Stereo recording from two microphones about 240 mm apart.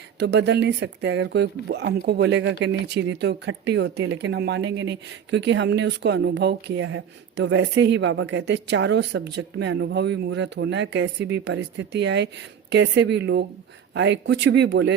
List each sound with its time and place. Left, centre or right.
0.2 s speech: right